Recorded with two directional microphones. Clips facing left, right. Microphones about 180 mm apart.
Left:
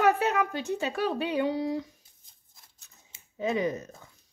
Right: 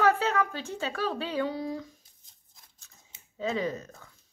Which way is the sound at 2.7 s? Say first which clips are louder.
Even; 15° left (ahead or behind).